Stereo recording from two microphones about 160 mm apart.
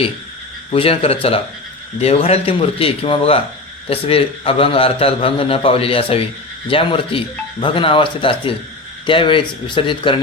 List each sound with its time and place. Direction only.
0.7 s a man's voice: 35° left (ahead or behind)